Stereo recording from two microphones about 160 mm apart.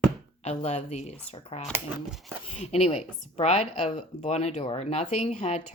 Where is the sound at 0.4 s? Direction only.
45° left (ahead or behind).